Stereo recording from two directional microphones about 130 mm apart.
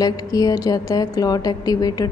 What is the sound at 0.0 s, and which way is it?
A woman's voice, 30° left (ahead or behind).